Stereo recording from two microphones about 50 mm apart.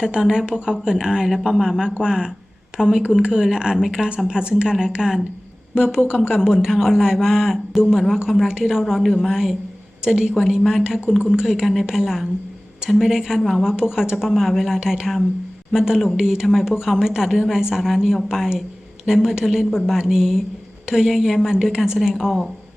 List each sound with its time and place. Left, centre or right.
0.0 s a woman's voice: centre
4.3 s a woman's voice: centre
11.3 s speech: centre
11.6 s a woman's voice: centre